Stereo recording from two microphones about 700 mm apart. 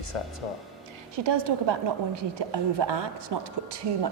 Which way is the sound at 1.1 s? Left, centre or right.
Right.